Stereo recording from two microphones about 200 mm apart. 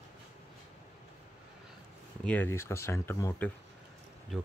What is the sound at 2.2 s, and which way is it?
Speech, 10° left (ahead or behind).